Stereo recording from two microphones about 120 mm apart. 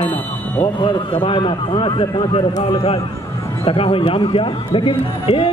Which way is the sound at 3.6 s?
50° left (ahead or behind).